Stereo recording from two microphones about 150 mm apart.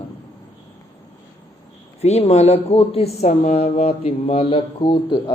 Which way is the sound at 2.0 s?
45° left (ahead or behind).